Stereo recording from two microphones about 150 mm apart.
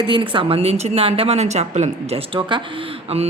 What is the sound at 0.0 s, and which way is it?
A woman's voice, 35° right (ahead or behind).